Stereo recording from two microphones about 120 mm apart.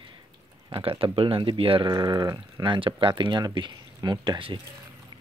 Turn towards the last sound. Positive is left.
turn(degrees=-40)  # may be behind; listen again after turning